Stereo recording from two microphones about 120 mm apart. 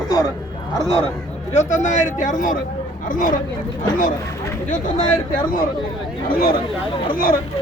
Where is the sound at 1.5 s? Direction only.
90° left.